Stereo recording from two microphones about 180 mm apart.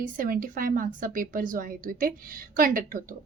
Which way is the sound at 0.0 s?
50° right (ahead or behind).